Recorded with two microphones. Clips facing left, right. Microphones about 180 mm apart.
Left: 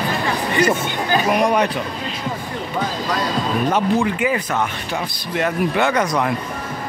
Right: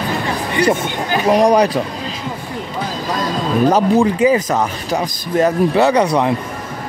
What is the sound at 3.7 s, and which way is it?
Speech, 25° right (ahead or behind).